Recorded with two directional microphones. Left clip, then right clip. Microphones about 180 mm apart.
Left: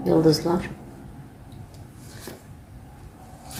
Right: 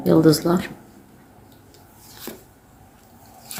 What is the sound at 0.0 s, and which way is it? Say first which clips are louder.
Speech: right 3 dB; 35° right (ahead or behind).